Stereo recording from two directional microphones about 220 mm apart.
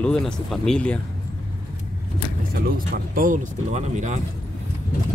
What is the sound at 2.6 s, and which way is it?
Speech, 40° right (ahead or behind).